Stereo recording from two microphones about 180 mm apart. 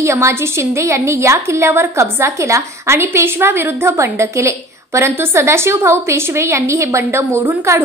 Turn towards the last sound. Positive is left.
turn(degrees=-15)  # may be behind; listen again after turning